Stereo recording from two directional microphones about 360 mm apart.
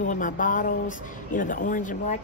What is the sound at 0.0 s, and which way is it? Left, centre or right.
Speech, left.